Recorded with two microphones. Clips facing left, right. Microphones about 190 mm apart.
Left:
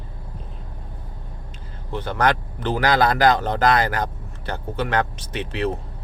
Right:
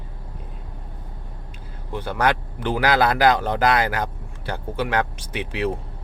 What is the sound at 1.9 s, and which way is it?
Speech, 10° right (ahead or behind).